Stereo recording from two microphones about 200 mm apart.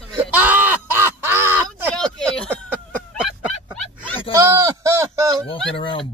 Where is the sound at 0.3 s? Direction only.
10° right (ahead or behind).